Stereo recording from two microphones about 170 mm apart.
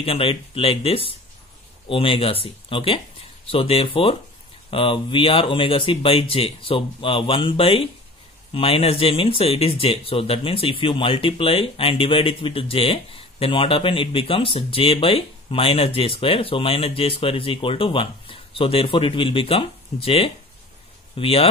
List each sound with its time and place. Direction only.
0.0 s speech: 35° left (ahead or behind)